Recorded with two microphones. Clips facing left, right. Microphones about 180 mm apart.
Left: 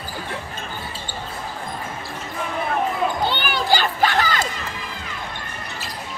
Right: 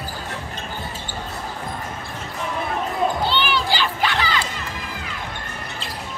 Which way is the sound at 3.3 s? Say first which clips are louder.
Left 1 dB; 45° left (ahead or behind).